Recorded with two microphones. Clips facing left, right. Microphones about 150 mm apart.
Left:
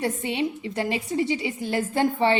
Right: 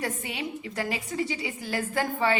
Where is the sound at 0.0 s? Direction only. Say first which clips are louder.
Left 7 dB; 25° left (ahead or behind).